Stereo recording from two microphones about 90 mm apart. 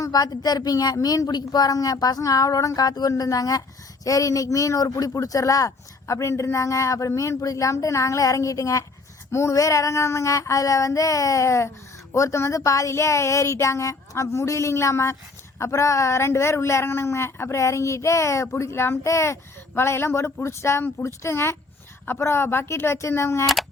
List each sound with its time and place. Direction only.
0.0 s speech: 45° left (ahead or behind)